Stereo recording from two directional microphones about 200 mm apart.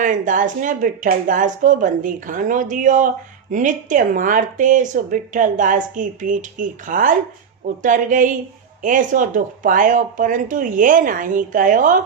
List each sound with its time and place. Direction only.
0.0 s speech: 40° right (ahead or behind)